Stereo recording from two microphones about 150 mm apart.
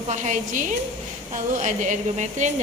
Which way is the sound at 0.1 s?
55° right (ahead or behind).